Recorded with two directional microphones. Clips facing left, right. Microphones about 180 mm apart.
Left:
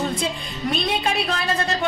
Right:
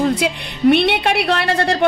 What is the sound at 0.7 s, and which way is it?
A woman's voice, 75° right (ahead or behind).